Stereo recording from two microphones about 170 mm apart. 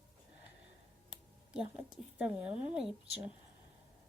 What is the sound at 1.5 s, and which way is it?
Speech, 5° right (ahead or behind).